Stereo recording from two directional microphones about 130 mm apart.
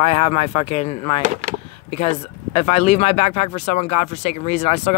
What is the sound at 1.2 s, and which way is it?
Speech, 70° right (ahead or behind).